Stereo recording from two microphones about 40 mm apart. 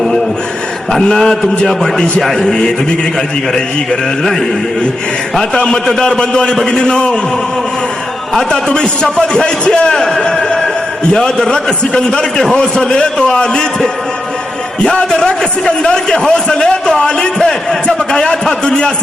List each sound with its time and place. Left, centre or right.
1.0 s speech: centre
5.4 s a man's voice: centre
8.4 s a man's voice: left
9.9 s a sound: centre
11.5 s a man's voice: left
14.8 s a man's voice: left